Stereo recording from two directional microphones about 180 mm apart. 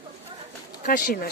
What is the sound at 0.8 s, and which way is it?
Speech, 50° left (ahead or behind).